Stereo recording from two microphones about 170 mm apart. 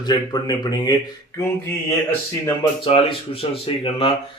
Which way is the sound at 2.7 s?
30° left (ahead or behind).